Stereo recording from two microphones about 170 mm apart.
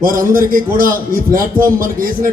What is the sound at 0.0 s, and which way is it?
A man's voice, 55° right (ahead or behind).